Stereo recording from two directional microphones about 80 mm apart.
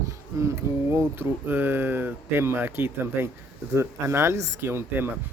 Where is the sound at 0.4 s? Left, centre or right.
Right.